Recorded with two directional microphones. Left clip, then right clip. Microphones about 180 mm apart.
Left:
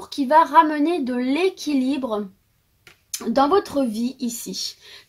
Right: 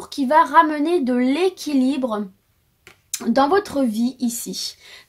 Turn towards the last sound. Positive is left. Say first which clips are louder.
# right 1 dB
turn(degrees=-40)  # may be behind; listen again after turning